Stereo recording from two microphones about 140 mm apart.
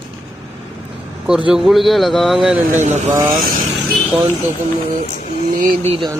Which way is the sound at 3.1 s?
20° right (ahead or behind).